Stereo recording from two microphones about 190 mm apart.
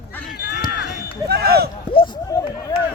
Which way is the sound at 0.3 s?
60° left (ahead or behind).